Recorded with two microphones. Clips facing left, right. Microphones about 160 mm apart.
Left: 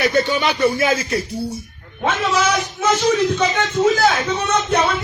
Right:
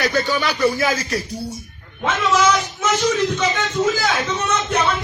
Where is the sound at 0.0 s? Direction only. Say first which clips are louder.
Left 2 dB; 25° left (ahead or behind).